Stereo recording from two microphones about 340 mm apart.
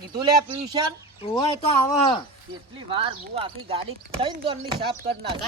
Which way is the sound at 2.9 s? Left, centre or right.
Centre.